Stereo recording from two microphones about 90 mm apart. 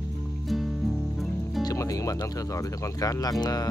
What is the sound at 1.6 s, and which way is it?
Music, 40° left (ahead or behind).